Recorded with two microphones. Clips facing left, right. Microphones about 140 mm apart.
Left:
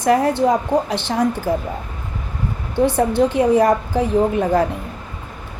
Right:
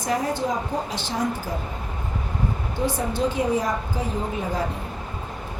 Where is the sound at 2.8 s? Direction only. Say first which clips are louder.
Left 8 dB; 65° left (ahead or behind).